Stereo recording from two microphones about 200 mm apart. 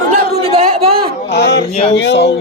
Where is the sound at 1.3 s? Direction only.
60° left (ahead or behind).